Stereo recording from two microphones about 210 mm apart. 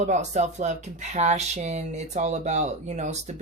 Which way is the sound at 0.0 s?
35° right (ahead or behind).